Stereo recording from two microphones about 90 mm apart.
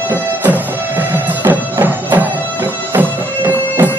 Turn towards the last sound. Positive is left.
turn(degrees=-20)  # may be behind; listen again after turning